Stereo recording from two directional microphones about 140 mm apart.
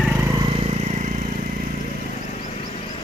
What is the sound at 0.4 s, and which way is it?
Vehicle, 40° right (ahead or behind).